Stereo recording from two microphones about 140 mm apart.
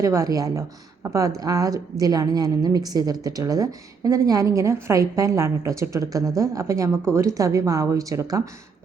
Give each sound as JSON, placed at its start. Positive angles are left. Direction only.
{"t": 0.0, "sound": "a woman's voice", "side_deg": -20}